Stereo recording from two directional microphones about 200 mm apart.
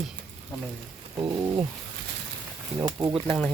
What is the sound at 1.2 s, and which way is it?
Speech, 15° right (ahead or behind).